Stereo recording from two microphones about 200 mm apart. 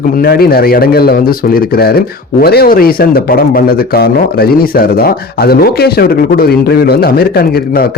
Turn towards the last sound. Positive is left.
turn(degrees=50)  # may be behind; listen again after turning